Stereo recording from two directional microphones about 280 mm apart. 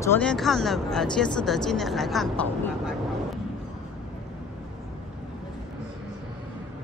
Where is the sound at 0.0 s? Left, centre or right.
Centre.